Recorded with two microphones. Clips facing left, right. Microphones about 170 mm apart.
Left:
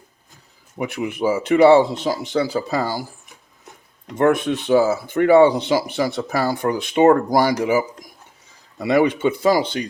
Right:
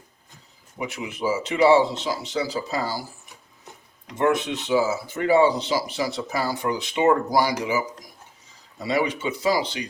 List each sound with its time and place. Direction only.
0.8 s speech: 55° left (ahead or behind)
4.0 s speech: 50° left (ahead or behind)